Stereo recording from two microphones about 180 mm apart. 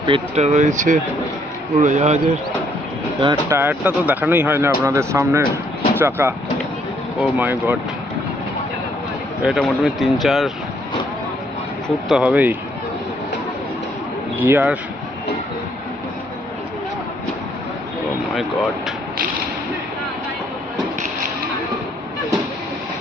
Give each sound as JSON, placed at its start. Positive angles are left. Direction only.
{"t": 0.0, "sound": "speech", "side_deg": -35}
{"t": 3.2, "sound": "speech", "side_deg": -25}
{"t": 3.6, "sound": "speech", "side_deg": -10}
{"t": 9.4, "sound": "speech", "side_deg": 0}
{"t": 12.0, "sound": "speech", "side_deg": -5}
{"t": 14.3, "sound": "speech", "side_deg": -10}